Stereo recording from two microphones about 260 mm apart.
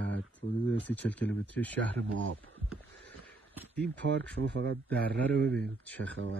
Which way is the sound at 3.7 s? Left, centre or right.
Centre.